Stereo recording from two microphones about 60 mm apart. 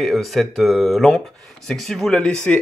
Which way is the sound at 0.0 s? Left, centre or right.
Centre.